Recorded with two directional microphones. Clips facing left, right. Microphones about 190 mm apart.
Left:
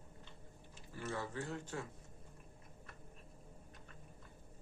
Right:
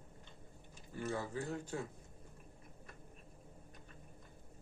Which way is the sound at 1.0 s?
15° right (ahead or behind).